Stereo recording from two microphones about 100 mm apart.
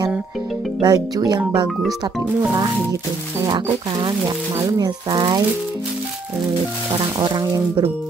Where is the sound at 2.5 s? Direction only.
45° right (ahead or behind).